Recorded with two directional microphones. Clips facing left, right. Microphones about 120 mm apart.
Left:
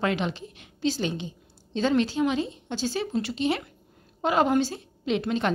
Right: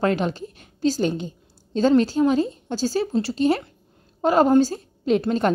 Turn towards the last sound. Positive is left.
turn(degrees=-40)  # may be behind; listen again after turning